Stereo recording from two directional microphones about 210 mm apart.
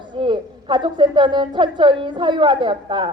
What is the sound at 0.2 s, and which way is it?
A woman's voice, 20° right (ahead or behind).